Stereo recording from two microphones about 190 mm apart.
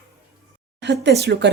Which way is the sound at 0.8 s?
65° right (ahead or behind).